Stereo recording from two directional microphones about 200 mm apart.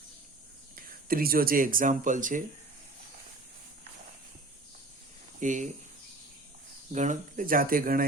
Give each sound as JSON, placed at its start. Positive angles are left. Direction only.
{"t": 0.8, "sound": "speech", "side_deg": -45}
{"t": 5.4, "sound": "speech", "side_deg": -40}
{"t": 6.9, "sound": "speech", "side_deg": -35}